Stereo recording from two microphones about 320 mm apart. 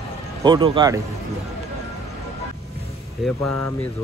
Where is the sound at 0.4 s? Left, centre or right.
Centre.